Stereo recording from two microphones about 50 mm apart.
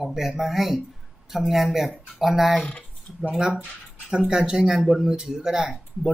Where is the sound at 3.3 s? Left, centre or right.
Centre.